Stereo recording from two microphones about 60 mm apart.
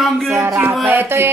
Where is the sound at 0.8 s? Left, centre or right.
Right.